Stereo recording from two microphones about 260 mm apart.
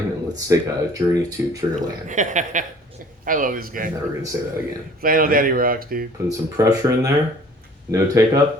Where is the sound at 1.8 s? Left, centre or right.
Right.